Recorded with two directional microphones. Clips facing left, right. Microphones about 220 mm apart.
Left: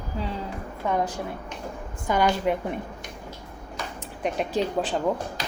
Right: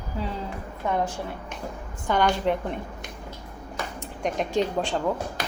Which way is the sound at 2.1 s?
10° left (ahead or behind).